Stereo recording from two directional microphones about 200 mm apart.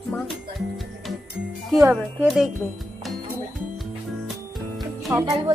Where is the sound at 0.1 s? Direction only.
10° left (ahead or behind).